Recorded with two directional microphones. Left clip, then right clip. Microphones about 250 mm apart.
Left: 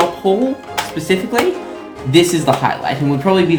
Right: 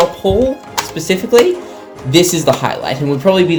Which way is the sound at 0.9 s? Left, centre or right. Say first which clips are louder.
Right 6 dB; right.